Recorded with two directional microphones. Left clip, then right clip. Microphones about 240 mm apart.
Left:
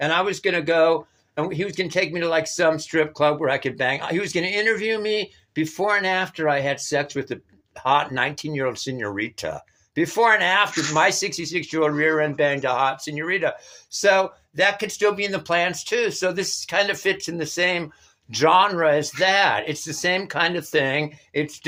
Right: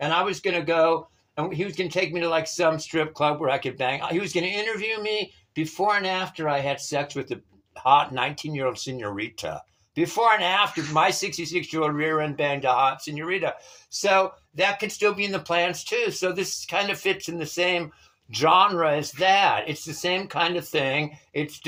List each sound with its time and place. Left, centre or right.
0.0 s speech: left